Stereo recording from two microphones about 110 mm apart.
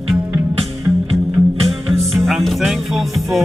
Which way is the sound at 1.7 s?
Centre (ahead or behind).